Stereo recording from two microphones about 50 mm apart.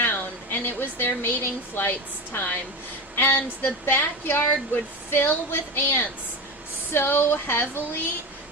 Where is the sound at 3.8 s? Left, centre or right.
Left.